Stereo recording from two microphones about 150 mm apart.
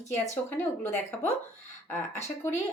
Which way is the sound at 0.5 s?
15° left (ahead or behind).